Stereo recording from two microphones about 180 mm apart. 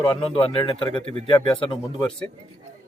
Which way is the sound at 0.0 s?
25° left (ahead or behind).